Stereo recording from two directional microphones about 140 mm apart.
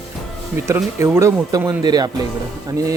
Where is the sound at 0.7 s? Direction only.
20° right (ahead or behind).